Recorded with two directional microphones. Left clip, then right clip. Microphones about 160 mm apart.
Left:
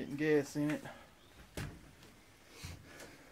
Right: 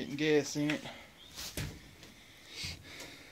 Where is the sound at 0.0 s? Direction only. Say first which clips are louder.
Right 2 dB; 5° left (ahead or behind).